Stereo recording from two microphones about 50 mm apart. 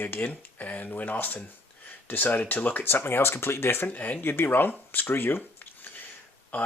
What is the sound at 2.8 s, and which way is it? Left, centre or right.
Speech, left.